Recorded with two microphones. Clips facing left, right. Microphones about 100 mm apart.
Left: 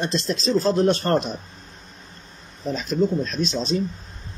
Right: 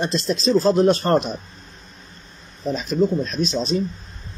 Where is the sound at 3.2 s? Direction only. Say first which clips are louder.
Right 2 dB; 15° right (ahead or behind).